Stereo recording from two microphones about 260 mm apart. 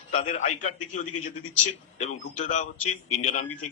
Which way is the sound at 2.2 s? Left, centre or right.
Left.